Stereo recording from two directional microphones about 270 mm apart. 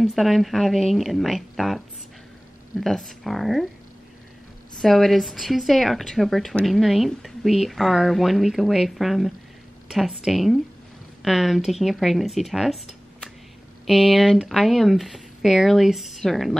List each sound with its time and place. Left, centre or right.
0.0 s speech: centre
2.8 s speech: centre
4.7 s speech: centre
13.8 s speech: centre